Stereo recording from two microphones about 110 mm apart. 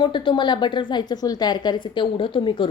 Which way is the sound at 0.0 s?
45° left (ahead or behind).